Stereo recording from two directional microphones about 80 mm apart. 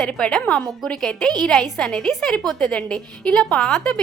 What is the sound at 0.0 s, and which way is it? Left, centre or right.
A woman's voice, centre.